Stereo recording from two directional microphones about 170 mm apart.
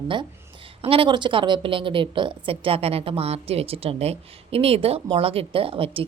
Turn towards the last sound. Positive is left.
turn(degrees=-35)  # may be behind; listen again after turning